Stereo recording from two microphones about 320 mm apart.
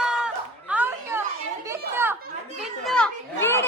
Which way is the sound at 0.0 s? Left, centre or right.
Centre.